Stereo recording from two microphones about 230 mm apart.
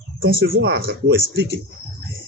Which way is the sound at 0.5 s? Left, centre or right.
Right.